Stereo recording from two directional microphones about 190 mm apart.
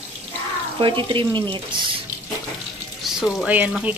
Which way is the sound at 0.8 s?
25° right (ahead or behind).